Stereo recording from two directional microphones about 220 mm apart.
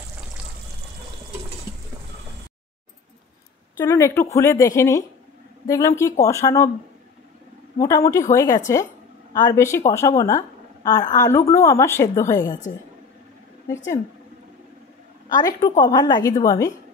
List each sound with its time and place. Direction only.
3.7 s a woman's voice: 10° left (ahead or behind)
7.8 s a woman's voice: 15° left (ahead or behind)
15.8 s a woman's voice: 20° left (ahead or behind)